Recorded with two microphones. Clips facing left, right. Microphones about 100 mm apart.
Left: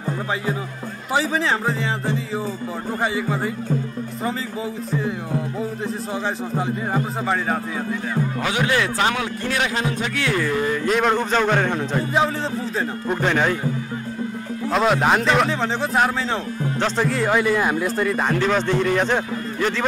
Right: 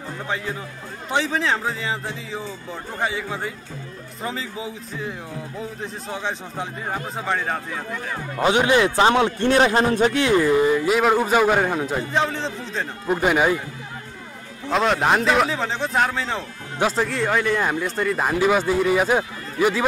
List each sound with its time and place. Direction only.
1.1 s speech: 5° left (ahead or behind)
6.2 s speech: centre (ahead or behind)
8.4 s speech: 25° right (ahead or behind); by 10.1 s 40° right (ahead or behind)
10.1 s a man's voice: 20° right (ahead or behind)
10.9 s a man's voice: 5° right (ahead or behind)
12.1 s speech: 5° left (ahead or behind)
13.2 s a man's voice: 10° right (ahead or behind)
14.7 s speech: centre (ahead or behind)